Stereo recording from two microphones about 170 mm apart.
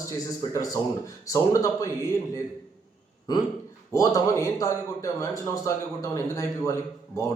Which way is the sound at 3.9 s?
20° left (ahead or behind).